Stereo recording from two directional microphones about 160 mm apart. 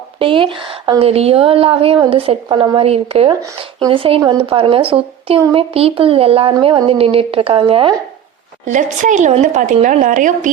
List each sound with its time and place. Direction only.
0.2 s a woman's voice: 35° right (ahead or behind)
8.6 s a woman's voice: 50° right (ahead or behind)